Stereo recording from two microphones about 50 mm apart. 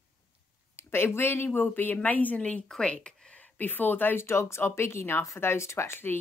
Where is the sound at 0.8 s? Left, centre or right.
Left.